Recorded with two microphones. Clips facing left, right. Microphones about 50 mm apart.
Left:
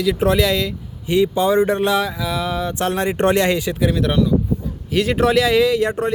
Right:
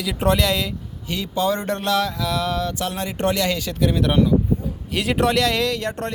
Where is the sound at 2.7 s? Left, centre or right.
Left.